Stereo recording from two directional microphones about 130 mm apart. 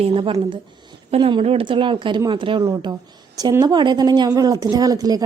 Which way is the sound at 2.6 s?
25° right (ahead or behind).